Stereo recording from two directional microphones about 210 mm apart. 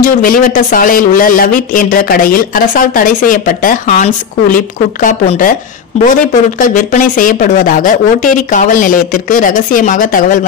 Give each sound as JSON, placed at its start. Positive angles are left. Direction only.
{"t": 0.0, "sound": "speech", "side_deg": 40}
{"t": 6.6, "sound": "speech", "side_deg": 35}